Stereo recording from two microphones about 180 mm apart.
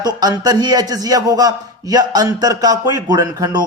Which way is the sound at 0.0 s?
20° right (ahead or behind).